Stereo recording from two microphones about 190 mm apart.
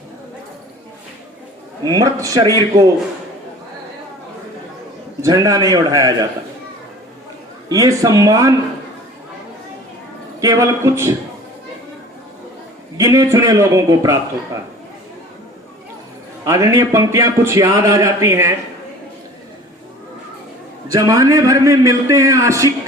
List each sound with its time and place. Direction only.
1.8 s a man's voice: 20° right (ahead or behind)
5.2 s a man's voice: 20° right (ahead or behind)
7.7 s a man's voice: 20° right (ahead or behind)
10.4 s a man's voice: 15° right (ahead or behind)
13.0 s a man's voice: 15° right (ahead or behind)
16.5 s a man's voice: 15° right (ahead or behind)
20.8 s a man's voice: 20° right (ahead or behind)